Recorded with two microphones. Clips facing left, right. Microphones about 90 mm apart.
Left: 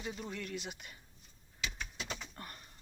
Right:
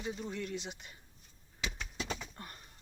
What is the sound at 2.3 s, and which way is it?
Bird, 25° right (ahead or behind).